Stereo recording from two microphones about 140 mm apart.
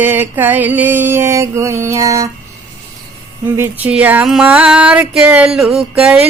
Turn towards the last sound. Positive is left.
turn(degrees=-10)  # may be behind; listen again after turning